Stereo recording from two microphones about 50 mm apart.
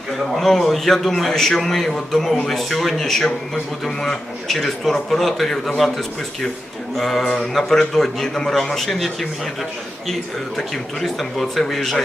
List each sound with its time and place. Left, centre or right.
0.3 s a man's voice: centre
11.0 s a man's voice: centre